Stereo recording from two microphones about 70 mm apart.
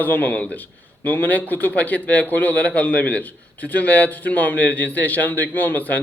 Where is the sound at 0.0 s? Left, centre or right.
Left.